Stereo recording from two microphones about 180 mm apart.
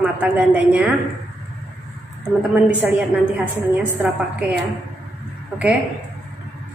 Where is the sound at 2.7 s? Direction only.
10° right (ahead or behind).